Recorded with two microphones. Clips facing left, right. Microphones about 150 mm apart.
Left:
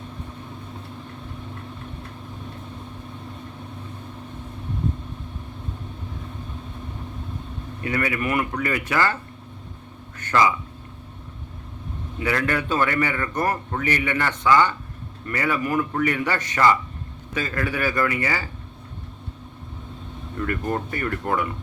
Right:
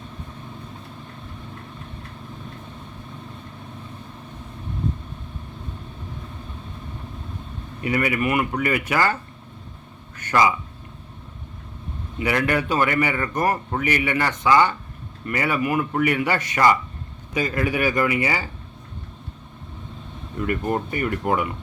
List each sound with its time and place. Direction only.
7.9 s a man's voice: 10° right (ahead or behind)
10.2 s a man's voice: 10° right (ahead or behind)
12.2 s a man's voice: 10° right (ahead or behind)
20.3 s a man's voice: 15° right (ahead or behind)